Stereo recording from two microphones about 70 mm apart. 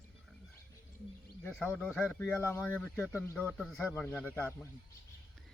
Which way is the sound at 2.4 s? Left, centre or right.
Left.